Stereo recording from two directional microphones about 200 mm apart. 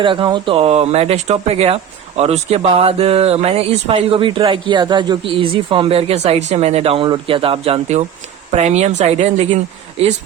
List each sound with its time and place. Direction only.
0.0 s speech: 25° right (ahead or behind)